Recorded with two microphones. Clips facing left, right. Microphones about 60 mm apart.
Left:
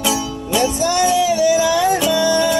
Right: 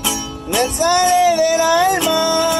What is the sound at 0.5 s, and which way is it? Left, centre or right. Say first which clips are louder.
Music: right 1 dB; right.